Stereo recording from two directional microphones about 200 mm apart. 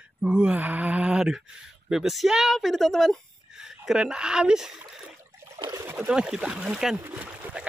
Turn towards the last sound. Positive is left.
turn(degrees=-10)  # may be behind; listen again after turning